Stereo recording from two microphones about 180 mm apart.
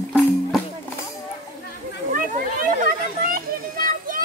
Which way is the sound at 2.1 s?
50° right (ahead or behind).